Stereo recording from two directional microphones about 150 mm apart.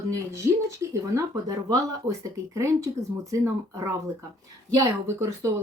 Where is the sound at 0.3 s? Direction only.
20° right (ahead or behind).